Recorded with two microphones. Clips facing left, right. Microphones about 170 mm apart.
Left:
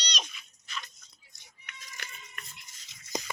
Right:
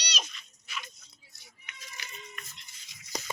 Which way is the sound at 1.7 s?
50° left (ahead or behind).